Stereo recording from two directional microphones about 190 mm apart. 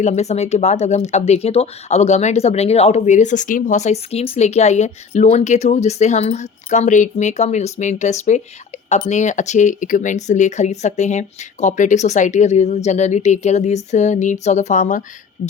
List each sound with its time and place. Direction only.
0.0 s speech: 35° left (ahead or behind)